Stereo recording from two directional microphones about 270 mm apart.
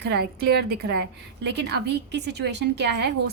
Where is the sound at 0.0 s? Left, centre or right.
Right.